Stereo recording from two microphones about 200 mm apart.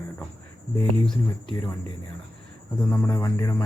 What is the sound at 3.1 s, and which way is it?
Speech, 15° left (ahead or behind).